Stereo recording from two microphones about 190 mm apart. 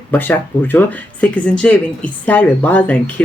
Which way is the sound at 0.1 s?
10° left (ahead or behind).